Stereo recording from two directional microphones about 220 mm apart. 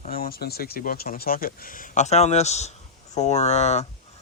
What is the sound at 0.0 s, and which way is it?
Speech, 40° left (ahead or behind).